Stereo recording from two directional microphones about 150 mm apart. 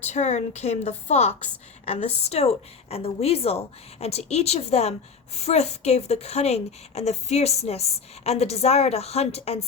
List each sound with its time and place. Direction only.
0.0 s a woman's voice: 50° left (ahead or behind)